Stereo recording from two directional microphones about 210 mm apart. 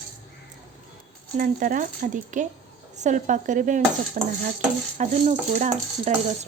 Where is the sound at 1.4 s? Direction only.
40° right (ahead or behind).